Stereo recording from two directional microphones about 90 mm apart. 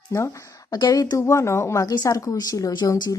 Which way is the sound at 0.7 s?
50° left (ahead or behind).